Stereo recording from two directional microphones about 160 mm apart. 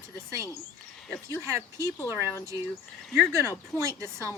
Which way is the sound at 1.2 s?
15° right (ahead or behind).